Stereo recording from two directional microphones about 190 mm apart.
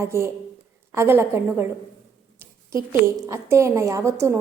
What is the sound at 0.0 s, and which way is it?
A woman's voice, 15° right (ahead or behind).